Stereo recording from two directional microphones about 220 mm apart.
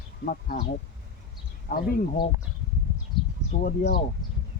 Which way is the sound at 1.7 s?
40° left (ahead or behind).